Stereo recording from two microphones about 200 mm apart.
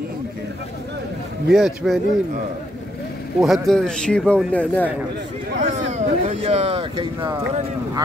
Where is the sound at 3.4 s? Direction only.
Centre (ahead or behind).